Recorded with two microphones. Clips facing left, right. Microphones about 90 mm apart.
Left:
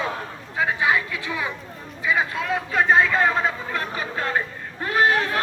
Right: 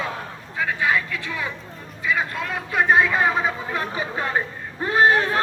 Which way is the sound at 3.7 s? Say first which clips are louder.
Right 1 dB; 20° right (ahead or behind).